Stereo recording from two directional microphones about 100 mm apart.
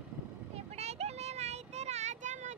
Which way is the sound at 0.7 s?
90° right.